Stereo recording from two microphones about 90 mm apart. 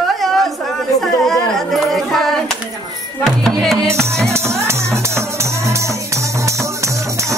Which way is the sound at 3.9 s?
30° right (ahead or behind).